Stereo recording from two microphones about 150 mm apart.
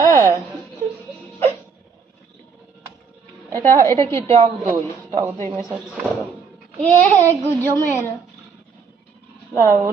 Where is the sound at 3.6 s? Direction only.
20° left (ahead or behind).